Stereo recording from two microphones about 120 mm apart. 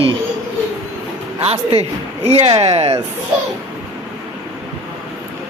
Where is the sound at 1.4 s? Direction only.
55° right (ahead or behind).